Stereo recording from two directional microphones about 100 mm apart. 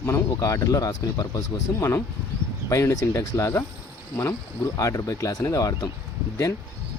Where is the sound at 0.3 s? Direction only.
30° left (ahead or behind).